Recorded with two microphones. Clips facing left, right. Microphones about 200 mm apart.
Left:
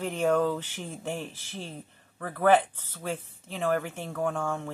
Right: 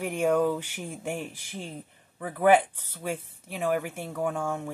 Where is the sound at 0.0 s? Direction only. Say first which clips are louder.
Right 1 dB; 15° right (ahead or behind).